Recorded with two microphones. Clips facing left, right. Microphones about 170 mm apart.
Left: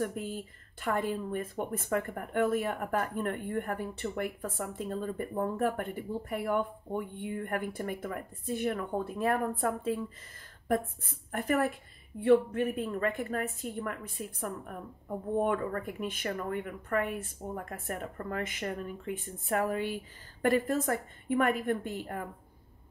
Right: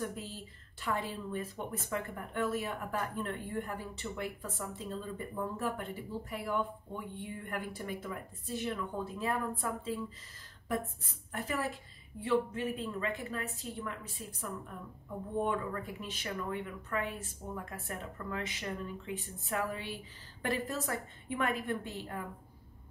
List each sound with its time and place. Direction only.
0.0 s speech: 55° left (ahead or behind)